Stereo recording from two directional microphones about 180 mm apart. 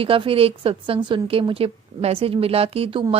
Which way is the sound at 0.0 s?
30° right (ahead or behind).